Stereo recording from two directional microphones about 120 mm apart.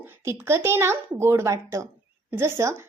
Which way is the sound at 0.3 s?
20° right (ahead or behind).